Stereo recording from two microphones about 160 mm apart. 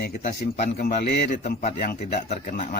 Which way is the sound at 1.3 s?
50° left (ahead or behind).